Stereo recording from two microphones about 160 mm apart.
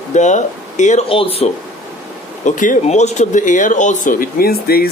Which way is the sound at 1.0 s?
35° left (ahead or behind).